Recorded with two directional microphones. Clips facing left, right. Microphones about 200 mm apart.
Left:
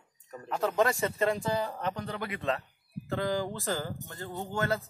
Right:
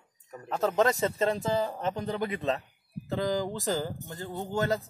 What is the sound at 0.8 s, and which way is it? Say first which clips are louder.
Speech: right 2 dB; 20° right (ahead or behind).